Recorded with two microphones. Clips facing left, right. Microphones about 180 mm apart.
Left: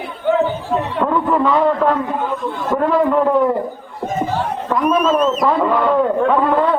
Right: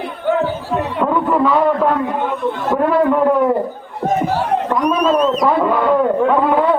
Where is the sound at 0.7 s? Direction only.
Centre (ahead or behind).